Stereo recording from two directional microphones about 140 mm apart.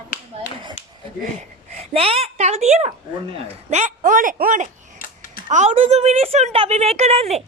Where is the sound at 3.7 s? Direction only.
60° right (ahead or behind).